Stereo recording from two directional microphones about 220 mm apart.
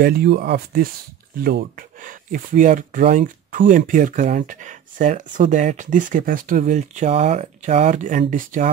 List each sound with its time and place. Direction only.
0.0 s speech: 45° right (ahead or behind)